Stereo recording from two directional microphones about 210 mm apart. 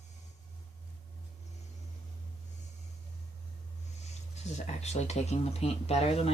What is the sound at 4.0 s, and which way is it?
Speech, 30° left (ahead or behind).